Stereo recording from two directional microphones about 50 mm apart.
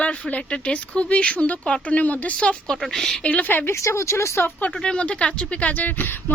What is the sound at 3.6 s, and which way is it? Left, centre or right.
Speech, left.